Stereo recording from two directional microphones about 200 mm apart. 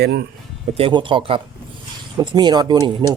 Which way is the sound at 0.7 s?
25° right (ahead or behind).